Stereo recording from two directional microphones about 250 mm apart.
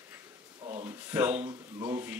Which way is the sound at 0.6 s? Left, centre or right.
Right.